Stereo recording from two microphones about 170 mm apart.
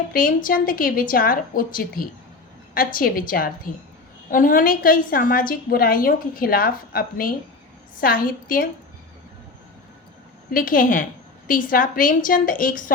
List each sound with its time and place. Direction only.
0.1 s a woman's voice: 55° left (ahead or behind)
10.5 s a woman's voice: 55° left (ahead or behind)